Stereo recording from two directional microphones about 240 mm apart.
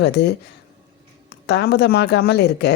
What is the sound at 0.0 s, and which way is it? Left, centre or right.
A woman's voice, left.